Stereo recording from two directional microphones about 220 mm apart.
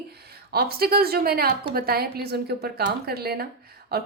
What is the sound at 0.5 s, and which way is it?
A woman's voice, 45° right (ahead or behind).